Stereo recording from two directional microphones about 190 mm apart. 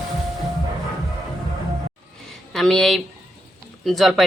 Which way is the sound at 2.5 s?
Centre (ahead or behind).